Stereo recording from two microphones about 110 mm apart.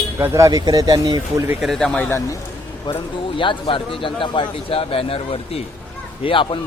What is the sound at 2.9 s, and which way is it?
A man's voice, 50° left (ahead or behind).